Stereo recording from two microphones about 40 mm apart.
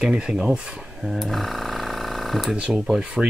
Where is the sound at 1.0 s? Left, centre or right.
Centre.